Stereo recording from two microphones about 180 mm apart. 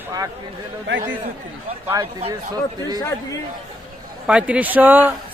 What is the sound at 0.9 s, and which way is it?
Speech, 85° right.